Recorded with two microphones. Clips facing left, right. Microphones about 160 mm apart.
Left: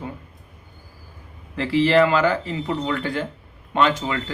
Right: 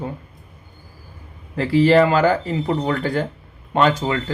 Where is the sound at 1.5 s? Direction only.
40° right (ahead or behind).